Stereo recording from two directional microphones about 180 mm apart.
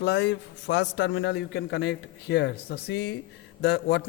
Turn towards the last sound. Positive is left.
turn(degrees=65)  # may be behind; listen again after turning